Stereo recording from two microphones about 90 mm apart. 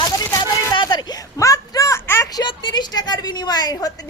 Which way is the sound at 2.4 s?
60° left (ahead or behind).